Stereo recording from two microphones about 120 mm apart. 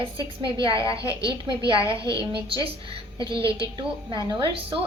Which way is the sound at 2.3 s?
50° right (ahead or behind).